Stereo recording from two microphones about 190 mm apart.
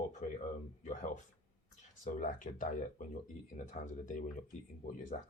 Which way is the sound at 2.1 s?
45° left (ahead or behind).